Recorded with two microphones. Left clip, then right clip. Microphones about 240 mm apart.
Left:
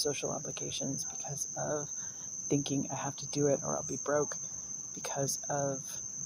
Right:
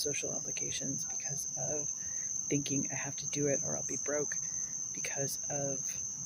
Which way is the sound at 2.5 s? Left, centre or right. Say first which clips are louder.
Left 3 dB; centre.